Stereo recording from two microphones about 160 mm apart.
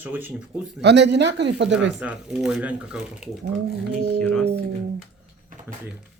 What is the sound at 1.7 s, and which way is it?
Speech, 5° right (ahead or behind).